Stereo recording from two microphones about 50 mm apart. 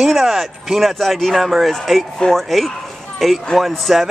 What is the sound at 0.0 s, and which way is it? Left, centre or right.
Speech, centre.